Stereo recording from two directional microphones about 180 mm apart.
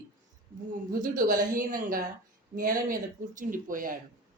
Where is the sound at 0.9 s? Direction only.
50° right (ahead or behind).